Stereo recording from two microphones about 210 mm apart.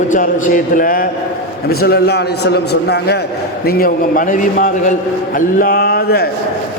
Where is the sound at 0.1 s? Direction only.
40° left (ahead or behind).